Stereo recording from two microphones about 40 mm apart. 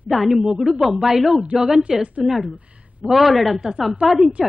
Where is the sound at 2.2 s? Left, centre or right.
Centre.